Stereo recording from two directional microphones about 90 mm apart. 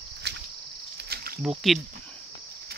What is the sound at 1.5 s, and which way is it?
Speech, 5° right (ahead or behind).